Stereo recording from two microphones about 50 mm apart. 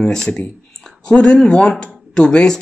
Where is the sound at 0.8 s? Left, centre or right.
Centre.